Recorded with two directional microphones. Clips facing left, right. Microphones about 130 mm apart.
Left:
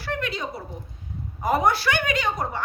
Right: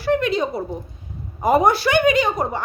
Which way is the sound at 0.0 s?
20° right (ahead or behind).